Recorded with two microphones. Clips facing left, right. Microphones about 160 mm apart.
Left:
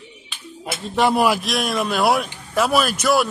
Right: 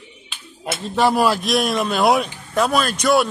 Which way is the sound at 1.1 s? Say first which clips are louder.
Even; 15° left (ahead or behind).